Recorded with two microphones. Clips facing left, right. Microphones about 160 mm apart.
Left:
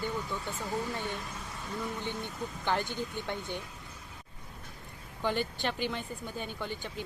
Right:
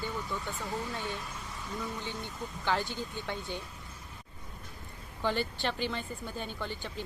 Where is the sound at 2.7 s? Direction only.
15° left (ahead or behind).